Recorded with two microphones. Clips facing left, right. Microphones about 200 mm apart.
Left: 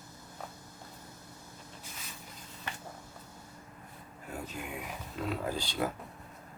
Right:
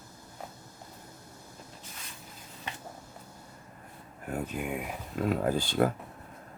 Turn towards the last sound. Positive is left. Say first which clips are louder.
# right 7 dB
turn(degrees=-50)  # may be behind; listen again after turning